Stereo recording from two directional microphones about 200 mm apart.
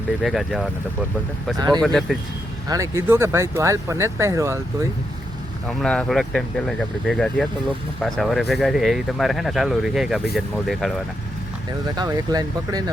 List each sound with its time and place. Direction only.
0.2 s speech: centre (ahead or behind)
1.5 s speech: 20° right (ahead or behind)
1.8 s speech: 5° left (ahead or behind)
2.6 s speech: 15° right (ahead or behind)
5.6 s speech: 5° left (ahead or behind)
11.9 s speech: 20° right (ahead or behind)